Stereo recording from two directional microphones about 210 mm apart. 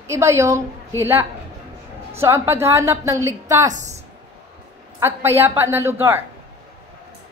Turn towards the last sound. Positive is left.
turn(degrees=-10)  # may be behind; listen again after turning